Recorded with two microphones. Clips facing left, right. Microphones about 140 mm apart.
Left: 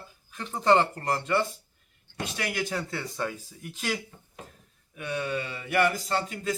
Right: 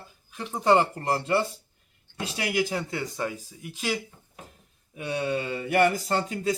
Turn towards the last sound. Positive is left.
turn(degrees=-40)  # may be behind; listen again after turning